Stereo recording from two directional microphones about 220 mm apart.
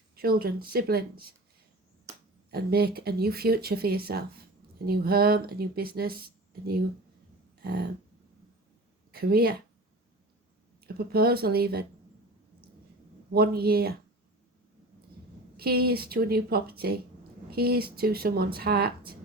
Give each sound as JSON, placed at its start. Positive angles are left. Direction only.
{"t": 0.2, "sound": "speech", "side_deg": -45}
{"t": 2.5, "sound": "speech", "side_deg": -45}
{"t": 7.6, "sound": "a sound", "side_deg": -45}
{"t": 9.1, "sound": "speech", "side_deg": -45}
{"t": 10.8, "sound": "speech", "side_deg": -45}
{"t": 13.3, "sound": "speech", "side_deg": -45}
{"t": 15.5, "sound": "speech", "side_deg": -45}